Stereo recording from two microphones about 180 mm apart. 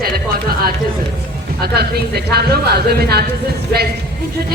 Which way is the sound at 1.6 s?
60° right (ahead or behind).